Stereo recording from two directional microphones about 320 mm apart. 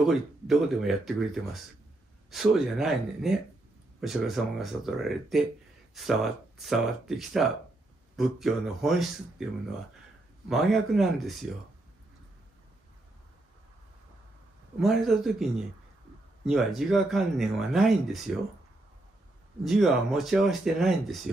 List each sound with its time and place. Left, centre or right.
0.0 s speech: centre
10.5 s speech: centre
14.8 s speech: centre
16.4 s speech: centre
19.6 s speech: centre